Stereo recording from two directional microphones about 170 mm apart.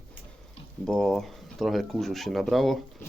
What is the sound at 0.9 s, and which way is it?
Speech, centre (ahead or behind).